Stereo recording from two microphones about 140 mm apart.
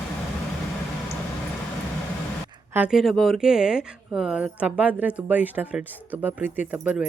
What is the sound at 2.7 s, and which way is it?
Speech, 5° right (ahead or behind).